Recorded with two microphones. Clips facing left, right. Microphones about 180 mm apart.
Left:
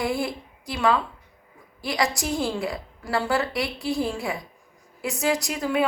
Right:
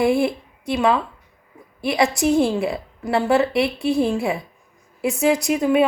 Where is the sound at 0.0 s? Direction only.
25° right (ahead or behind).